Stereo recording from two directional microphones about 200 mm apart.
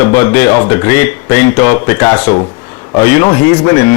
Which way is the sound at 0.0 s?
15° left (ahead or behind).